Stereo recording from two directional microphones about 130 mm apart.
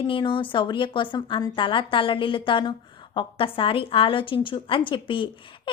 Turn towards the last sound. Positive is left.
turn(degrees=40)  # may be behind; listen again after turning